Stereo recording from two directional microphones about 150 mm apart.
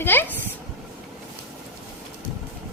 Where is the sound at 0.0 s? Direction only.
15° left (ahead or behind).